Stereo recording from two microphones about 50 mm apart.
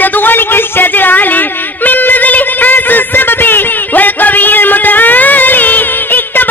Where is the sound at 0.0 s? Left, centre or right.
Left.